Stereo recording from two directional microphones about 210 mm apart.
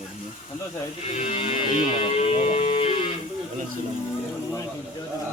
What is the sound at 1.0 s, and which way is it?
Music, 30° left (ahead or behind).